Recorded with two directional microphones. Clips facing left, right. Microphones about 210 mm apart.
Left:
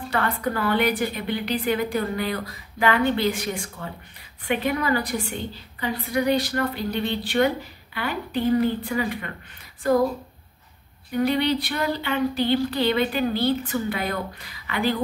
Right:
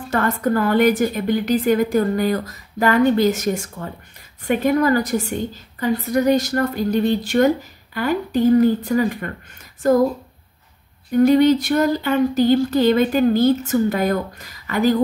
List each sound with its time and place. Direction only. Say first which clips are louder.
0.1 s a woman's voice: right 7 dB; 45° right (ahead or behind)
11.1 s a woman's voice: right 9 dB; 45° right (ahead or behind)